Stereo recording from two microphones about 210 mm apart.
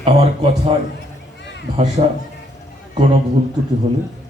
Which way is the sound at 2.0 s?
35° right (ahead or behind).